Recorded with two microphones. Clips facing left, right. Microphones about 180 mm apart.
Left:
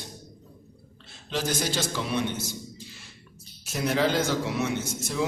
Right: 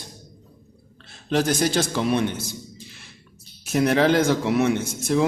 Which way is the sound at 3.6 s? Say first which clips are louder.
Right 6 dB; 60° right (ahead or behind).